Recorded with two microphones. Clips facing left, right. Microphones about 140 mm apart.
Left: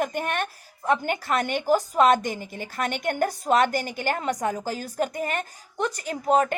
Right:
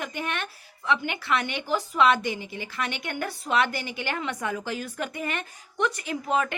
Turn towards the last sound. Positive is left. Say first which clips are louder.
# left 5 dB
turn(degrees=40)  # may be behind; listen again after turning